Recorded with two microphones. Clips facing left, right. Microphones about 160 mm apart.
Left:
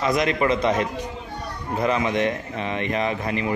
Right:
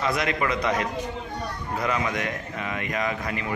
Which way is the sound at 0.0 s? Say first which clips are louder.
Left 4 dB; 20° left (ahead or behind).